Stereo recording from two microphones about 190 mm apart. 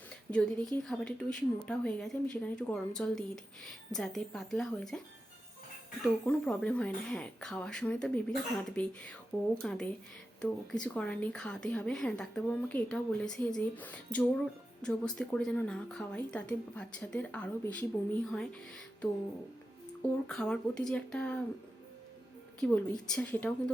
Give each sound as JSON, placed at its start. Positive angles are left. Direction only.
{"t": 0.3, "sound": "speech", "side_deg": 5}
{"t": 6.2, "sound": "a woman's voice", "side_deg": 5}
{"t": 20.0, "sound": "speech", "side_deg": 5}
{"t": 22.6, "sound": "a woman's voice", "side_deg": 5}